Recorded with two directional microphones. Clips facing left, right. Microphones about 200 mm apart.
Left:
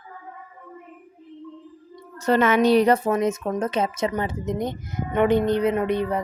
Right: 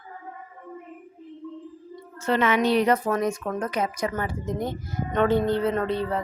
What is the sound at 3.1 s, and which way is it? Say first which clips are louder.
A woman's voice: left 3 dB; 20° left (ahead or behind).